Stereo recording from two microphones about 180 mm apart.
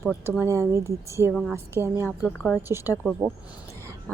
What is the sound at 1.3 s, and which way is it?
A woman's voice, centre (ahead or behind).